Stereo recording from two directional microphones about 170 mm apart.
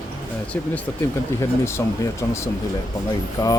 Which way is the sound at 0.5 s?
10° left (ahead or behind).